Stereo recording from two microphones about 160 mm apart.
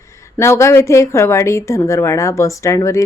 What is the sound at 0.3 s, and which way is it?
A woman's voice, 15° left (ahead or behind).